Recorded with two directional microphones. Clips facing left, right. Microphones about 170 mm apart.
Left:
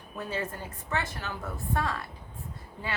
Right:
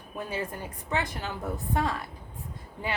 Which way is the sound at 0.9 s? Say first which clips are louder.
Right 2 dB; 15° right (ahead or behind).